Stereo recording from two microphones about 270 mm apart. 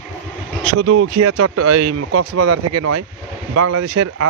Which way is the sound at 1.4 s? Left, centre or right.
Right.